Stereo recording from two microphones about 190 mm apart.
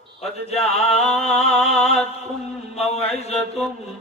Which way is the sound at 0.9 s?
35° left (ahead or behind).